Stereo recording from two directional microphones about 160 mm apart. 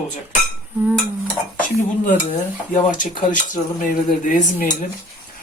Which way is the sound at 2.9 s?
55° left (ahead or behind).